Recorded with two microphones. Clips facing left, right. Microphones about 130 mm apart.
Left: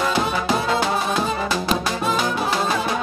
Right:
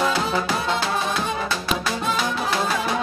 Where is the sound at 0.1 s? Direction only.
20° left (ahead or behind).